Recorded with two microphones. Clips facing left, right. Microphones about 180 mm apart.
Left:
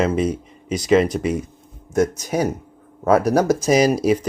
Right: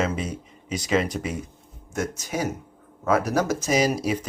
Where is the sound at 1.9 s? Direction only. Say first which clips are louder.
Left 9 dB; 35° left (ahead or behind).